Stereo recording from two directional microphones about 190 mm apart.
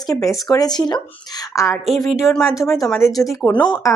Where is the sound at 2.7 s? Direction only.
15° left (ahead or behind).